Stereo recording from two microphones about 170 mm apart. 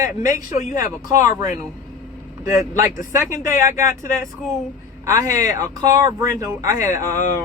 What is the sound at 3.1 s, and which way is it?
Speech, 15° right (ahead or behind).